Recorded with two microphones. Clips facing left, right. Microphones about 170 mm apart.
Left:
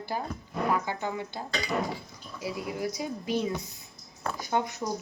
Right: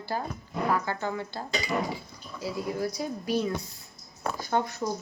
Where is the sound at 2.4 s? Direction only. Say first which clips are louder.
Right 2 dB; 15° left (ahead or behind).